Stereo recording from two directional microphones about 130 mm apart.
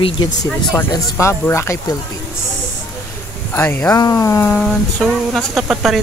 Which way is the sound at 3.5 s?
15° left (ahead or behind).